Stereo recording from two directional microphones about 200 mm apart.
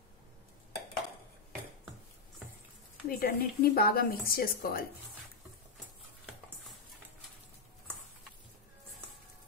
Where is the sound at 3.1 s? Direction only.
50° left (ahead or behind).